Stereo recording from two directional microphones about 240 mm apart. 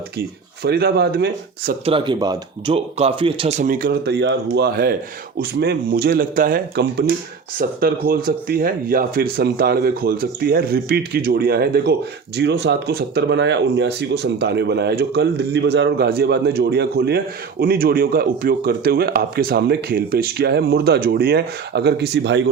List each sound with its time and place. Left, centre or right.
0.6 s speech: right
1.8 s speech: right